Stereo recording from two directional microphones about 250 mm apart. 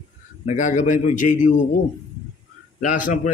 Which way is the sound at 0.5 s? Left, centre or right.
Left.